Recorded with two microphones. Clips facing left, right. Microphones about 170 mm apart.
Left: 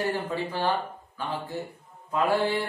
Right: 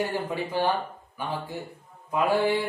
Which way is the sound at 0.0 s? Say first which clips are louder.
Even; 15° right (ahead or behind).